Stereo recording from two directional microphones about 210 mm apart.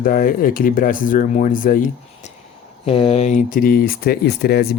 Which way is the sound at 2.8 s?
25° left (ahead or behind).